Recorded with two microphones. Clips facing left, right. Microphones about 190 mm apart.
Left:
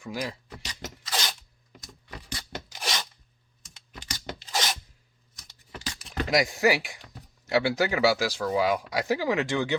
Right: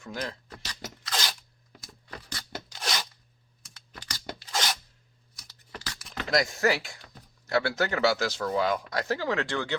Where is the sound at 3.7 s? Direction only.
20° left (ahead or behind).